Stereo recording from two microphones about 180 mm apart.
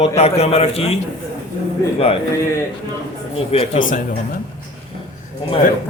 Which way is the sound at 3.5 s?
35° left (ahead or behind).